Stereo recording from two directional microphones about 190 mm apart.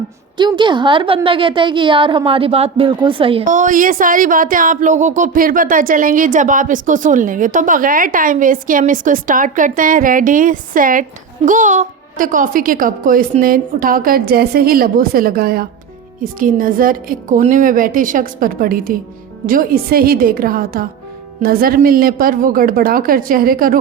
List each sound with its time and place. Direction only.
0.3 s a woman's voice: 25° right (ahead or behind)
3.4 s speech: 40° right (ahead or behind)